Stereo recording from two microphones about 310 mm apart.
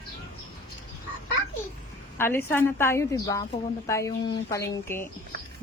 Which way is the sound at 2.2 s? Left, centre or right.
Centre.